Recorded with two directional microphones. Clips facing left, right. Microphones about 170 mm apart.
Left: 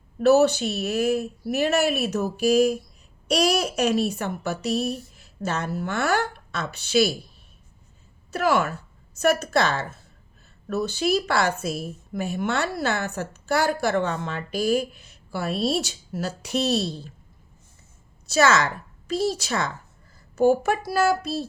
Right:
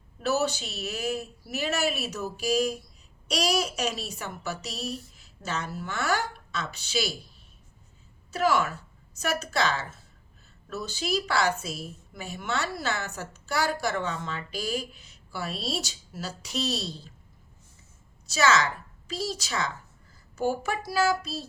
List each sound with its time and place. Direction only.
0.2 s a woman's voice: 60° left (ahead or behind)
8.3 s a woman's voice: 60° left (ahead or behind)
18.3 s a woman's voice: 55° left (ahead or behind)